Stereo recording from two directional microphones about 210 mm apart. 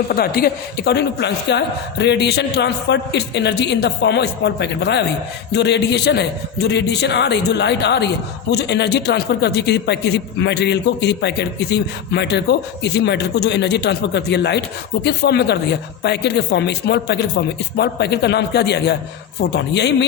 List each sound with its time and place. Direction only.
0.1 s a man's voice: 45° left (ahead or behind)